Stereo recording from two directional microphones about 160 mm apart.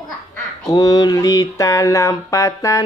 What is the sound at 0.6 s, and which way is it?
Speech, 25° left (ahead or behind).